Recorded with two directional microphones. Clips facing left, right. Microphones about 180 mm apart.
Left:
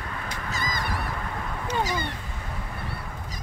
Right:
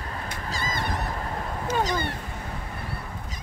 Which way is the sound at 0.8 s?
40° right (ahead or behind).